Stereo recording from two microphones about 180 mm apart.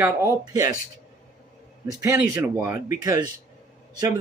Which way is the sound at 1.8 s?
15° right (ahead or behind).